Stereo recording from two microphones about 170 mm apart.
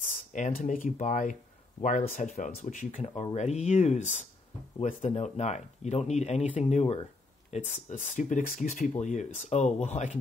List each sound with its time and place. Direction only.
0.3 s speech: 45° left (ahead or behind)